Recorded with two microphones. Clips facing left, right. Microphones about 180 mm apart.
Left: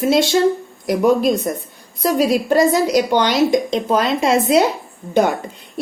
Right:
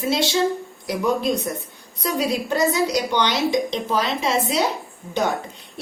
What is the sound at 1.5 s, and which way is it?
Speech, 50° left (ahead or behind).